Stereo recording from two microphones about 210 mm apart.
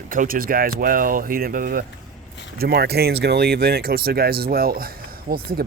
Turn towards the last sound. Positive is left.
turn(degrees=-45)  # may be behind; listen again after turning